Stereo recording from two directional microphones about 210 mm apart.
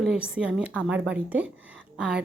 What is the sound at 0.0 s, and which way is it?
A woman's voice, 5° right (ahead or behind).